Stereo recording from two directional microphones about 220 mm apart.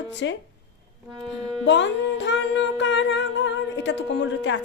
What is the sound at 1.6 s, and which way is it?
Speech, 55° left (ahead or behind).